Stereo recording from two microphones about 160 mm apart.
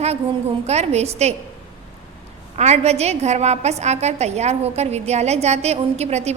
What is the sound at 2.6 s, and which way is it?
A woman's voice, 45° right (ahead or behind).